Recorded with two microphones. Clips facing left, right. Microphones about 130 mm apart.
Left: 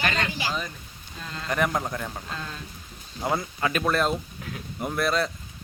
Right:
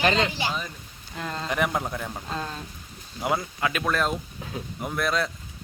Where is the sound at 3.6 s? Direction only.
Centre (ahead or behind).